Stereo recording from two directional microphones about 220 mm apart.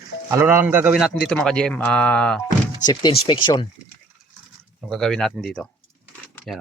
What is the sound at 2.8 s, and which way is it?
Speech, 20° left (ahead or behind).